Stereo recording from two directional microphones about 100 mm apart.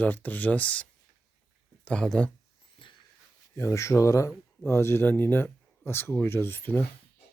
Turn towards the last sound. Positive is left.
turn(degrees=20)  # may be behind; listen again after turning